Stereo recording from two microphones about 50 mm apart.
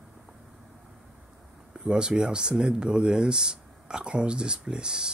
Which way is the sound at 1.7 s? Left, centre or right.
Centre.